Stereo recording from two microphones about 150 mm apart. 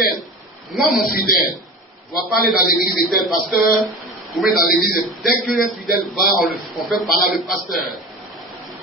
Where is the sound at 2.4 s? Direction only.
75° left (ahead or behind).